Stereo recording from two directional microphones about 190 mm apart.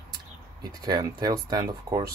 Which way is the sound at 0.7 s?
20° right (ahead or behind).